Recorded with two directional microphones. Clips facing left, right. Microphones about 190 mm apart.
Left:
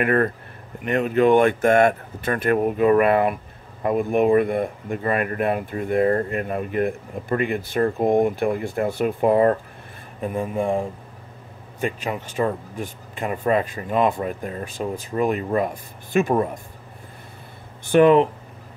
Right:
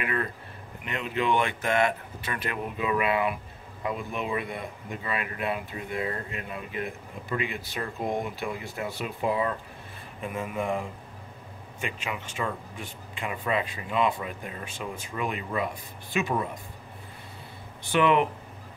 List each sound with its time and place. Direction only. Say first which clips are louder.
0.0 s speech: left 11 dB; 55° left (ahead or behind)
10.2 s speech: left 7 dB; 35° left (ahead or behind)
17.9 s speech: left 8 dB; 40° left (ahead or behind)